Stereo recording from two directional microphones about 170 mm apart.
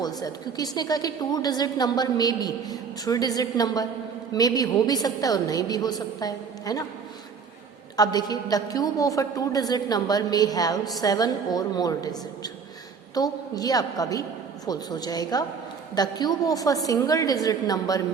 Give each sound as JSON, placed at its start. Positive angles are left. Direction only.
{"t": 0.0, "sound": "a woman's voice", "side_deg": 20}
{"t": 7.9, "sound": "a woman's voice", "side_deg": 25}